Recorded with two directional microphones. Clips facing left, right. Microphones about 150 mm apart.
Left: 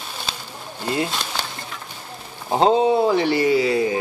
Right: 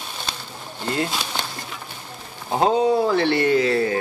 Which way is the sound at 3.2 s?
10° left (ahead or behind).